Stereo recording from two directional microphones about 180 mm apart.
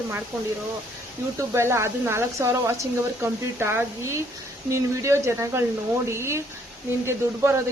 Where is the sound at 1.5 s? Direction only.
15° right (ahead or behind).